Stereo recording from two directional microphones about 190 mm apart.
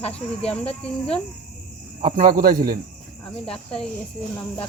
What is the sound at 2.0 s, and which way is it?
Speech, 45° right (ahead or behind).